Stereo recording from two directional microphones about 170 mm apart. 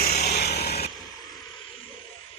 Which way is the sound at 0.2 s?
70° left (ahead or behind).